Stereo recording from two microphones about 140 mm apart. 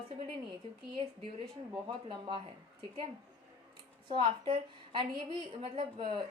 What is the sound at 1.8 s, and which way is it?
Speech, 35° right (ahead or behind).